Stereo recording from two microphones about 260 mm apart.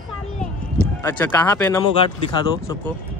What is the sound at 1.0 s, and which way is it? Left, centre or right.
Speech, centre.